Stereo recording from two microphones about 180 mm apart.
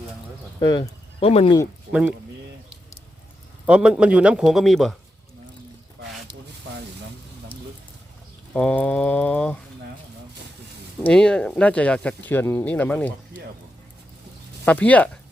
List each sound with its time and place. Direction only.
0.6 s speech: 25° left (ahead or behind)
1.9 s speech: 5° right (ahead or behind)
3.7 s a man's voice: 5° right (ahead or behind)
8.5 s speech: 5° left (ahead or behind)
11.0 s speech: 5° left (ahead or behind)
14.6 s speech: 10° left (ahead or behind)